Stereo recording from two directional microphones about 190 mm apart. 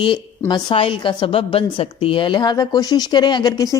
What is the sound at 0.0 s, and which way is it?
A woman's voice, 25° left (ahead or behind).